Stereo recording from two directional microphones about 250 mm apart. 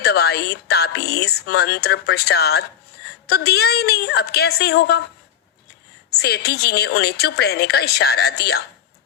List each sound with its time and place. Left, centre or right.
0.0 s a woman's voice: left
6.1 s a woman's voice: left